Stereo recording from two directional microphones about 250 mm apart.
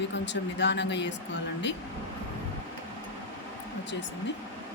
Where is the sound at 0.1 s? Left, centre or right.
Left.